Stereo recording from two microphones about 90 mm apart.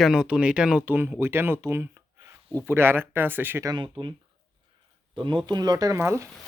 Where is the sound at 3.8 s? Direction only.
65° right (ahead or behind).